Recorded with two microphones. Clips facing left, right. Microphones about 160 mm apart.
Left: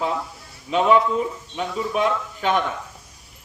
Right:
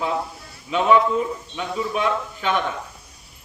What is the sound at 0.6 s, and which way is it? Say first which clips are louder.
Speech: even; 35° left (ahead or behind).